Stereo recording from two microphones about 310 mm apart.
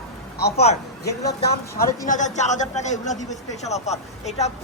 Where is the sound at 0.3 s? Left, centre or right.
Left.